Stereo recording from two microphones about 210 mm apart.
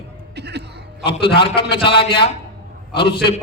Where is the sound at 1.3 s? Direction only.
25° left (ahead or behind).